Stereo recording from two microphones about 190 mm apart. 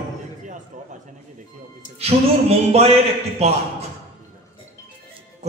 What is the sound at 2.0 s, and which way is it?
A man's voice, 35° right (ahead or behind).